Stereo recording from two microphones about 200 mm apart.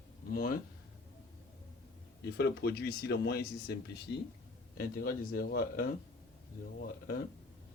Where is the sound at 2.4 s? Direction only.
55° left (ahead or behind).